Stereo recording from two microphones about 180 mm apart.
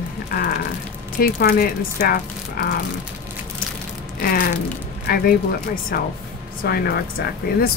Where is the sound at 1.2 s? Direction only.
55° left (ahead or behind).